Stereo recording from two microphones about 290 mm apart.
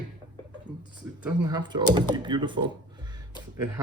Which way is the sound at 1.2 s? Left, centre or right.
Centre.